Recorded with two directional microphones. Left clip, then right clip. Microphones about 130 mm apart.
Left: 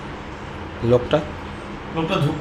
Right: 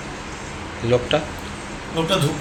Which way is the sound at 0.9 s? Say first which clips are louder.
Left 1 dB; 50° left (ahead or behind).